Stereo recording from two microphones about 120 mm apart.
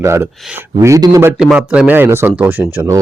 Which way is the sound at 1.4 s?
10° right (ahead or behind).